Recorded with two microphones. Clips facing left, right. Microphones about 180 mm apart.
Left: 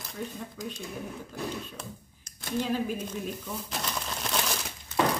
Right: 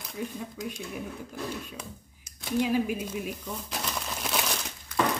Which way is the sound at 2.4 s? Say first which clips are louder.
Right 3 dB; 10° right (ahead or behind).